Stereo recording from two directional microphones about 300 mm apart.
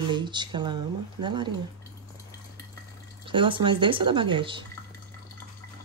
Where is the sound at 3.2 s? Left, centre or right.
Centre.